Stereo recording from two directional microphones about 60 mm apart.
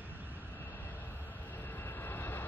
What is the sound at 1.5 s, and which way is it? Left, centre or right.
Vehicle, left.